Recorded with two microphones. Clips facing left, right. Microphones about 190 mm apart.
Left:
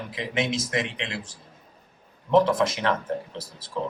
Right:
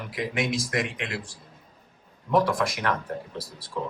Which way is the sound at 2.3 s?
25° left (ahead or behind).